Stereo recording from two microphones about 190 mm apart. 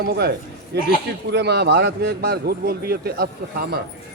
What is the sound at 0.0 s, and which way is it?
A man's voice, 55° right (ahead or behind).